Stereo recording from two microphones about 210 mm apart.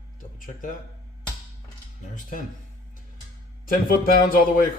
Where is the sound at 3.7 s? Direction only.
45° left (ahead or behind).